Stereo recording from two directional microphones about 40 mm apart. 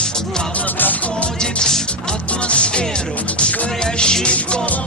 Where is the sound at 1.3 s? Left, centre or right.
Centre.